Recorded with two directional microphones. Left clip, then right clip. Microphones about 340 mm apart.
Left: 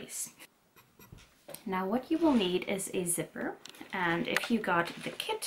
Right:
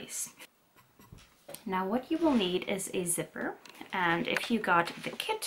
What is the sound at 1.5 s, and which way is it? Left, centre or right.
Speech, centre.